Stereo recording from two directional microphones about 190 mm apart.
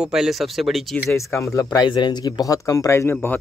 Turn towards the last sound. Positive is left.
turn(degrees=10)  # may be behind; listen again after turning